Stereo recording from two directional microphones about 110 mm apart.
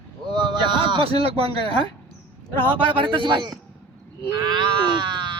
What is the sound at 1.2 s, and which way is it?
Speech, 60° right (ahead or behind).